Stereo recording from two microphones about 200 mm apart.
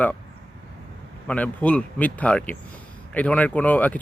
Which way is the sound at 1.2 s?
5° left (ahead or behind).